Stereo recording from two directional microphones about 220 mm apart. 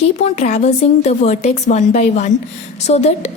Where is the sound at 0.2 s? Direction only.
30° left (ahead or behind).